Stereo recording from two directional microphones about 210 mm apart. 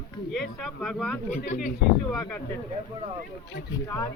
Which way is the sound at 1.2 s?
35° left (ahead or behind).